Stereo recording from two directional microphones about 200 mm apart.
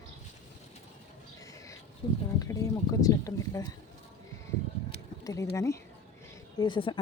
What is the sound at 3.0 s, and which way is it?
Speech, 15° left (ahead or behind).